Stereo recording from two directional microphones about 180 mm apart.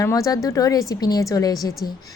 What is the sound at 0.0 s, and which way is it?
A woman's voice, 20° left (ahead or behind).